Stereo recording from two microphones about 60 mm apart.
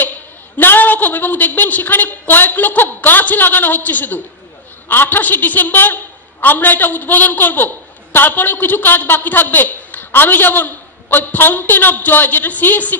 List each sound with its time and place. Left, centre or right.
0.6 s a man's voice: left